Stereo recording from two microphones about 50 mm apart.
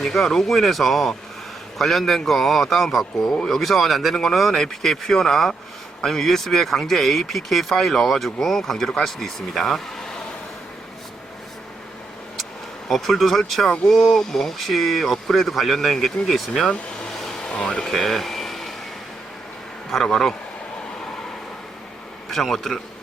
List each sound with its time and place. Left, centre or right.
0.0 s speech: centre
12.9 s speech: centre
17.4 s speech: left
17.8 s a sound: centre
19.9 s speech: centre
22.3 s speech: centre